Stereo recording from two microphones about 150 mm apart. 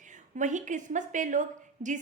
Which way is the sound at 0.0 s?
55° right (ahead or behind).